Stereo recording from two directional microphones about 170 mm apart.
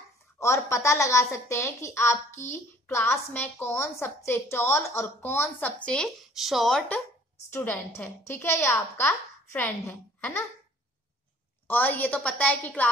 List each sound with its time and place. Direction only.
0.7 s a woman's voice: 15° left (ahead or behind)
5.9 s speech: centre (ahead or behind)
7.5 s a woman's voice: 15° left (ahead or behind)
11.6 s a woman's voice: 10° left (ahead or behind)